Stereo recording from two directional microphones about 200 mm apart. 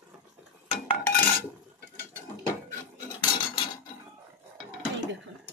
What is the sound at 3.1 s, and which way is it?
Cutlery, 20° left (ahead or behind).